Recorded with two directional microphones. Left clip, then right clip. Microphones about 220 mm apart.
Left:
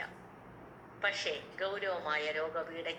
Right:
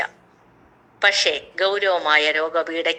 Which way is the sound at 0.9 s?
45° right (ahead or behind).